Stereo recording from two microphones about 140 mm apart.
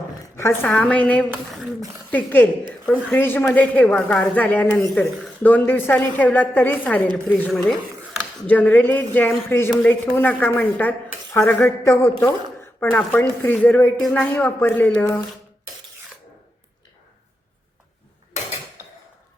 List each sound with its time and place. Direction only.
0.3 s a woman's voice: 15° left (ahead or behind)
7.5 s a sound: centre (ahead or behind)
8.4 s a woman's voice: 10° left (ahead or behind)